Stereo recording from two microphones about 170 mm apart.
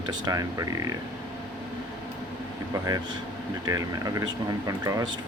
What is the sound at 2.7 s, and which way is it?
Speech, 20° right (ahead or behind).